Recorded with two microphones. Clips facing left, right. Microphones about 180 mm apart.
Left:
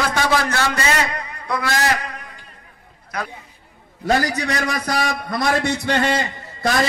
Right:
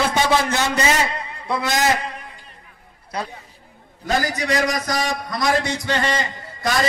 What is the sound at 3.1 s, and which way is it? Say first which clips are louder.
Speech: even; 30° right (ahead or behind).